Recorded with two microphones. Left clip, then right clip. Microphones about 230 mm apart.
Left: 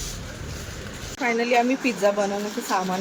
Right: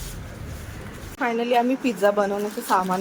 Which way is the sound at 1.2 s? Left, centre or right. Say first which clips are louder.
Even; right.